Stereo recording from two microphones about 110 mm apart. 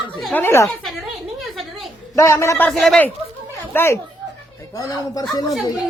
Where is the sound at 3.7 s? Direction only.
25° left (ahead or behind).